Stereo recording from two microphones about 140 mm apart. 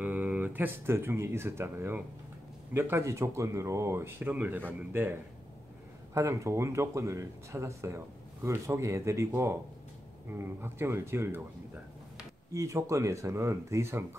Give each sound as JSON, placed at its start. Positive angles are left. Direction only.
{"t": 0.0, "sound": "speech", "side_deg": -10}
{"t": 6.1, "sound": "speech", "side_deg": -20}
{"t": 12.5, "sound": "speech", "side_deg": -20}